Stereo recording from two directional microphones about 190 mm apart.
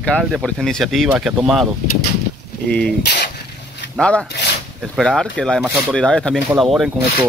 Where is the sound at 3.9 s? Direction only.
5° left (ahead or behind).